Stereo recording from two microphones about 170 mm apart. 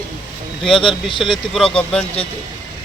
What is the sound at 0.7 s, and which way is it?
Speech, 30° left (ahead or behind).